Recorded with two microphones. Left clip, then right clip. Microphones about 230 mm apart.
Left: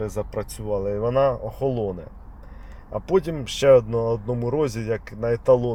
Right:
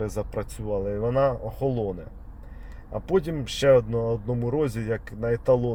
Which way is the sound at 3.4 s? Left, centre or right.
Left.